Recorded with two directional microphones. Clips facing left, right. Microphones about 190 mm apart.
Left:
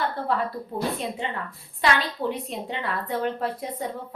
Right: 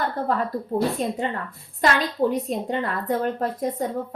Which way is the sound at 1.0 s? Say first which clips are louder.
Right 4 dB; 45° right (ahead or behind).